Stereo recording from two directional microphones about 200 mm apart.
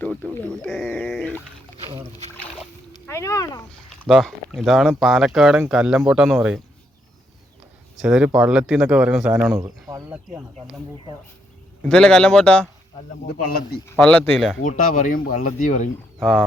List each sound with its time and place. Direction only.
0.0 s speech: 10° left (ahead or behind)
1.1 s a sound: 10° left (ahead or behind)
1.8 s speech: 20° right (ahead or behind)
2.3 s boat: 10° left (ahead or behind)
3.1 s speech: 15° left (ahead or behind)
4.0 s speech: centre (ahead or behind)
7.9 s speech: 5° right (ahead or behind)
11.8 s speech: 5° left (ahead or behind)
13.9 s speech: 5° left (ahead or behind)
14.6 s speech: 40° left (ahead or behind)